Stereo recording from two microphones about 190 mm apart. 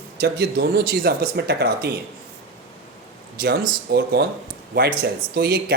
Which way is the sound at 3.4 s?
55° right (ahead or behind).